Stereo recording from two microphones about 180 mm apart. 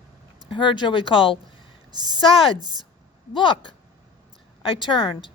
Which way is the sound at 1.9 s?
25° right (ahead or behind).